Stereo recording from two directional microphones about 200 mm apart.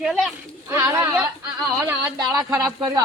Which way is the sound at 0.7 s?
15° right (ahead or behind).